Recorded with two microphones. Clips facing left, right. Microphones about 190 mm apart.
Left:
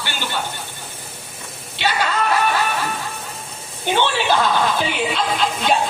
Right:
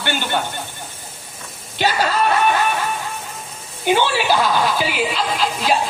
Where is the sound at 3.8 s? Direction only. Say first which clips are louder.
Right 2 dB; 10° right (ahead or behind).